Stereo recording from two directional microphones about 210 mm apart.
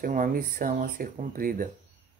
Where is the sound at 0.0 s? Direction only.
40° right (ahead or behind).